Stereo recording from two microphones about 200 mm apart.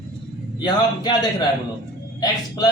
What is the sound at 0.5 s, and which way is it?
Speech, 20° left (ahead or behind).